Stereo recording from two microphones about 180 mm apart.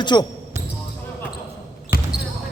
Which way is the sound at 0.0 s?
25° left (ahead or behind).